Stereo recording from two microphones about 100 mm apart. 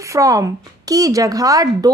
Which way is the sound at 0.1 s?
35° right (ahead or behind).